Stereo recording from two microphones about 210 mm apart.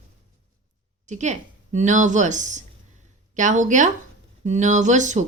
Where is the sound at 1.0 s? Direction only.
35° right (ahead or behind).